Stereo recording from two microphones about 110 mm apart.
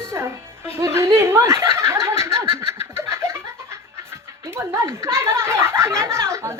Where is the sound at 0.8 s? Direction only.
25° right (ahead or behind).